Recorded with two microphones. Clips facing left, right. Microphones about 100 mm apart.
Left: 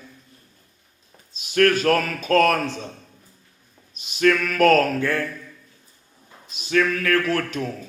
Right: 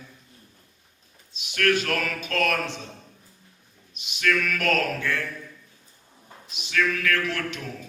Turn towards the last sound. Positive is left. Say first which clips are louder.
# left 5 dB
turn(degrees=40)  # may be behind; listen again after turning